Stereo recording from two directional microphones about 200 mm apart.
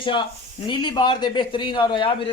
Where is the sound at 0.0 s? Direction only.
25° left (ahead or behind).